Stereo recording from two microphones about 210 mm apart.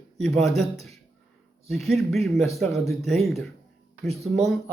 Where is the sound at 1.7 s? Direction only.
Centre (ahead or behind).